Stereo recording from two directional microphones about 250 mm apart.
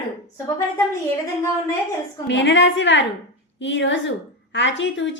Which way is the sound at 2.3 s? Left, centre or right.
Left.